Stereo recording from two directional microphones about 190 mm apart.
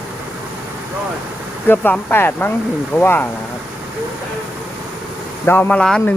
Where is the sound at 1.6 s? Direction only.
10° left (ahead or behind).